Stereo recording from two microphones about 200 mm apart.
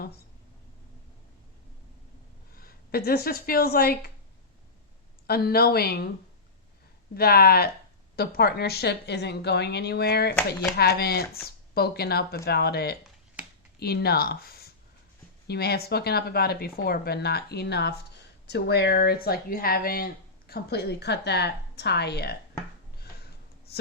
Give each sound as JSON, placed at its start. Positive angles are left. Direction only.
{"t": 2.6, "sound": "speech", "side_deg": 50}
{"t": 5.2, "sound": "speech", "side_deg": 50}
{"t": 7.1, "sound": "a woman's voice", "side_deg": 50}